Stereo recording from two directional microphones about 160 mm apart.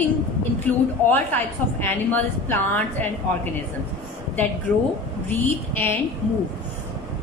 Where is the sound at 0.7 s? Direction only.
10° left (ahead or behind).